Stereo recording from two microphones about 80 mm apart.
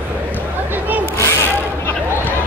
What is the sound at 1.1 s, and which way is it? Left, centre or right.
Mechanisms, left.